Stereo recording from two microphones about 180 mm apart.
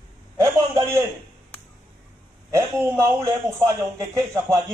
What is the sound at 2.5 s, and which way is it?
A man's voice, 15° right (ahead or behind).